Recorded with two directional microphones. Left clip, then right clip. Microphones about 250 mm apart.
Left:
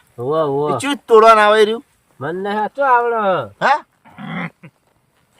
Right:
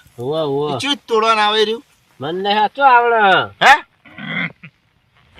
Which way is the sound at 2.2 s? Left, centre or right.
Centre.